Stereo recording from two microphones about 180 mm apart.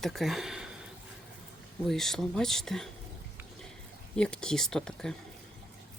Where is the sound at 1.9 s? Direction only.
Centre (ahead or behind).